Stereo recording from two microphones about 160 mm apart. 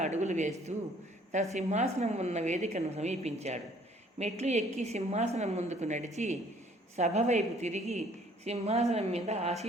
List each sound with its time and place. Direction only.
0.0 s a woman's voice: 45° right (ahead or behind)
1.5 s a woman's voice: 45° right (ahead or behind)